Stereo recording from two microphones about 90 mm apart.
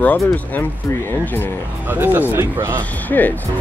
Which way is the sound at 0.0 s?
20° left (ahead or behind).